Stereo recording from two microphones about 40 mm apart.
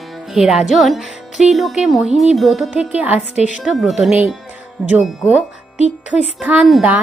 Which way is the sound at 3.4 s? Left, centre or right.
Right.